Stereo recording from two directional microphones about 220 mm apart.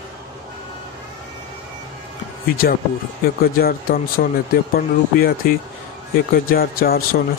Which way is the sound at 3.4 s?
45° left (ahead or behind).